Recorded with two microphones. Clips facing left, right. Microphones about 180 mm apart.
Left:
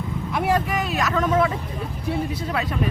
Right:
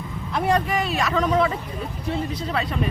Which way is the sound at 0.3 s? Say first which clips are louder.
Right 1 dB; 5° left (ahead or behind).